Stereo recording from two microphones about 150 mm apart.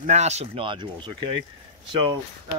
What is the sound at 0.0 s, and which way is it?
Speech, 50° right (ahead or behind).